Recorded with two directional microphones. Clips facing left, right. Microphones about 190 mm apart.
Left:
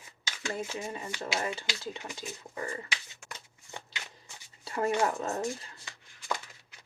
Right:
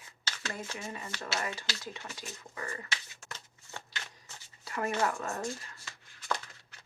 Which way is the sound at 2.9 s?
15° left (ahead or behind).